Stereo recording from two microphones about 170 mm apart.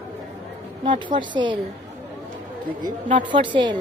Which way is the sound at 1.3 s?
30° right (ahead or behind).